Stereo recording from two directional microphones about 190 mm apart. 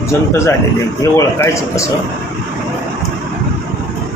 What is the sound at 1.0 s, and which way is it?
Speech, 15° left (ahead or behind).